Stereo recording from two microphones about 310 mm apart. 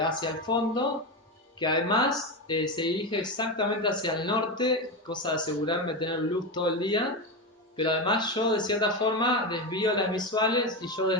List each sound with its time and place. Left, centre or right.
0.0 s speech: centre